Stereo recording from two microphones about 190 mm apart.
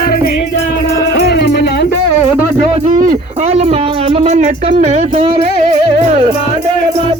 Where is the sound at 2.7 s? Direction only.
40° right (ahead or behind).